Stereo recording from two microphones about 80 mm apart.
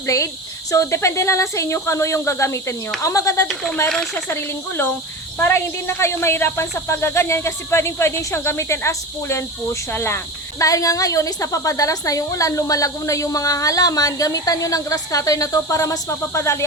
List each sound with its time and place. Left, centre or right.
0.0 s speech: left
3.4 s speech: centre
4.3 s speech: left
10.6 s a woman's voice: left